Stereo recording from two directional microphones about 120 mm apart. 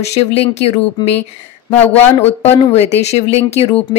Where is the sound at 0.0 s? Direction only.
60° left (ahead or behind).